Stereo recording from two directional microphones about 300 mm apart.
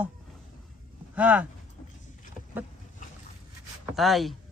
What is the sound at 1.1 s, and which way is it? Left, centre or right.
Speech, centre.